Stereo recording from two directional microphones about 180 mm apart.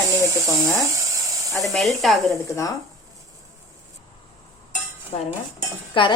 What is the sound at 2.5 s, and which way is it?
Speech, 15° left (ahead or behind).